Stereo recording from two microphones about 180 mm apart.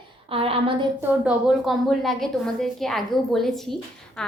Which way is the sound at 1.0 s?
5° right (ahead or behind).